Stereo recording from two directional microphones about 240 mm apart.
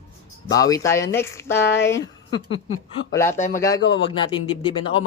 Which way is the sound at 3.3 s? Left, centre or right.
Left.